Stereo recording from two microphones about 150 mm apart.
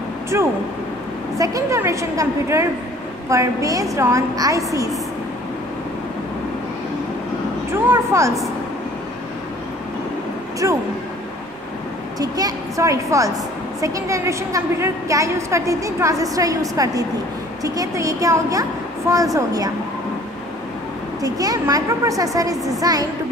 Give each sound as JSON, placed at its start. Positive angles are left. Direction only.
{"t": 0.3, "sound": "a woman's voice", "side_deg": -15}
{"t": 7.7, "sound": "a woman's voice", "side_deg": -20}
{"t": 10.6, "sound": "a woman's voice", "side_deg": -20}
{"t": 12.2, "sound": "a woman's voice", "side_deg": -25}
{"t": 21.2, "sound": "a woman's voice", "side_deg": -25}